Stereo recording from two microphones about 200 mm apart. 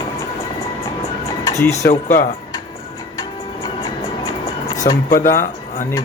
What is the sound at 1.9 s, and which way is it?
Speech, 35° left (ahead or behind).